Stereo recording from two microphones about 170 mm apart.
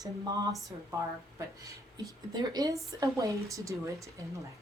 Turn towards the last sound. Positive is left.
turn(degrees=-20)  # may be behind; listen again after turning